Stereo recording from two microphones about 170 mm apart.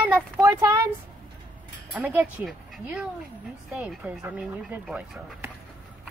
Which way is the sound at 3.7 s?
5° right (ahead or behind).